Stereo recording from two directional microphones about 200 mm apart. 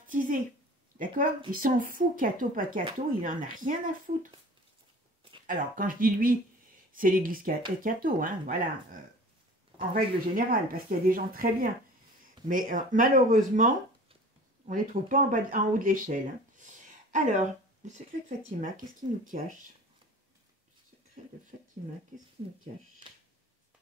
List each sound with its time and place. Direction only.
0.0 s speech: 45° right (ahead or behind)
5.5 s speech: 45° right (ahead or behind)
14.7 s speech: 40° right (ahead or behind)